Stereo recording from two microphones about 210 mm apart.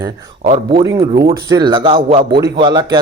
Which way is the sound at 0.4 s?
25° right (ahead or behind).